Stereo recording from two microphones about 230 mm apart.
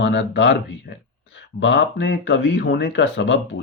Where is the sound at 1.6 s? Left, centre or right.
Left.